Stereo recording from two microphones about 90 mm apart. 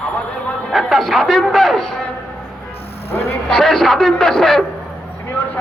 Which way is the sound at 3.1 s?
30° left (ahead or behind).